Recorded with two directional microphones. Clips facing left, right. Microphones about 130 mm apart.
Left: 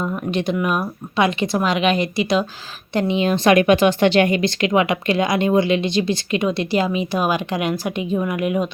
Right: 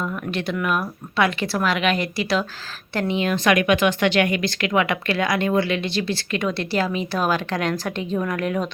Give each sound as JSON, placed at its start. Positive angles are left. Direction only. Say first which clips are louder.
{"t": 0.0, "sound": "speech", "louder": "left 4 dB", "side_deg": 20}